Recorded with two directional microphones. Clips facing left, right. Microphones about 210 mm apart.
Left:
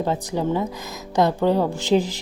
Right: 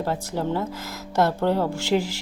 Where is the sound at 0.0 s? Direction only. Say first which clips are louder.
Left 3 dB; 15° left (ahead or behind).